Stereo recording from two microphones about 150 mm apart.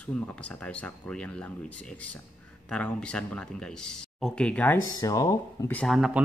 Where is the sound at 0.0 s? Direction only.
10° left (ahead or behind).